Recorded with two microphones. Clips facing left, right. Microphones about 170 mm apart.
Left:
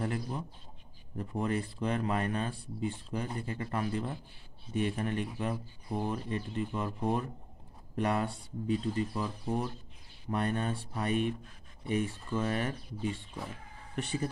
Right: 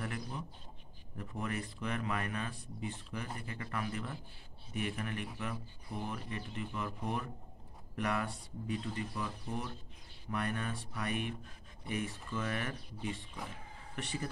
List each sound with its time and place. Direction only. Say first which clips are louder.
0.0 s bird: left 6 dB; 30° left (ahead or behind)
1.1 s speech: left 7 dB; 30° left (ahead or behind)
13.9 s speech: left 6 dB; 25° left (ahead or behind)